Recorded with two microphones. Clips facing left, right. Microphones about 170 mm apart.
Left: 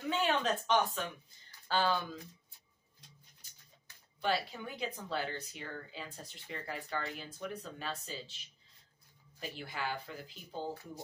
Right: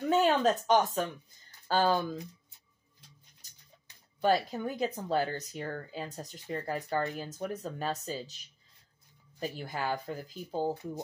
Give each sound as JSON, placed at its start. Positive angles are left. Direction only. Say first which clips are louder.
{"t": 0.1, "sound": "speech", "louder": "right 7 dB", "side_deg": -40}
{"t": 4.2, "sound": "speech", "louder": "right 7 dB", "side_deg": -45}